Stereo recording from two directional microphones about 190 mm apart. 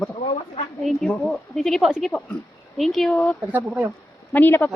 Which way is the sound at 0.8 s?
Centre (ahead or behind).